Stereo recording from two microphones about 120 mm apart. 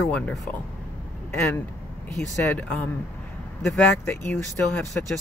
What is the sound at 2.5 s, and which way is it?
Speech, 10° left (ahead or behind).